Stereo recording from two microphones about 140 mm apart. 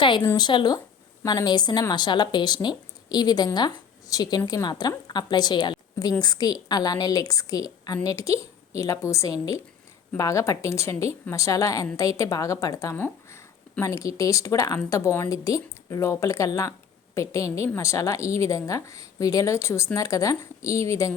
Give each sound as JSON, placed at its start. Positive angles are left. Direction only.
{"t": 0.0, "sound": "a woman's voice", "side_deg": 35}